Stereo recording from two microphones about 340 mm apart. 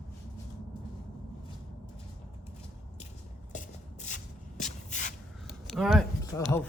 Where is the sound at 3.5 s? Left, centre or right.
Left.